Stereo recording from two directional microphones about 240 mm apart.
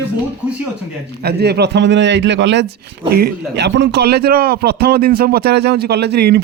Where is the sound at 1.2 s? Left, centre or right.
Right.